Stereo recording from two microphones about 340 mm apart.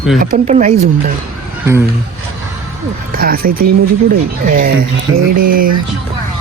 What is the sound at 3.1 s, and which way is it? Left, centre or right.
Speech, right.